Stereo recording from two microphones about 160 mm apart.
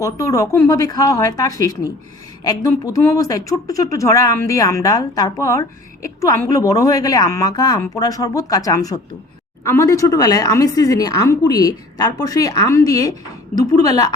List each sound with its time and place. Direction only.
0.0 s speech: 20° left (ahead or behind)